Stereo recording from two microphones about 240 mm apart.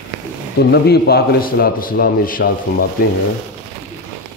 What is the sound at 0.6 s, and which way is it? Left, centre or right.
Speech, left.